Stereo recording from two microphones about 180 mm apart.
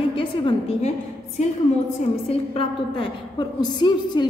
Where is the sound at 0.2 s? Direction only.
35° left (ahead or behind).